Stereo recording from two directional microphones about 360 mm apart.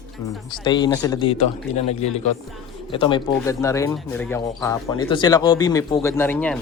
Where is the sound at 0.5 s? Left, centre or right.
Centre.